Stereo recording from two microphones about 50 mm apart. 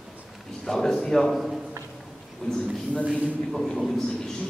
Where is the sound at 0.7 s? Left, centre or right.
Centre.